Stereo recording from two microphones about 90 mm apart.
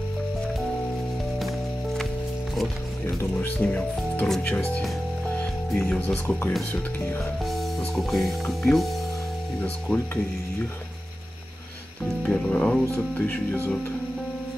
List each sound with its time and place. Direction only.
3.3 s speech: 20° left (ahead or behind)
7.9 s speech: centre (ahead or behind)
9.6 s speech: 15° left (ahead or behind)
12.2 s speech: 10° left (ahead or behind)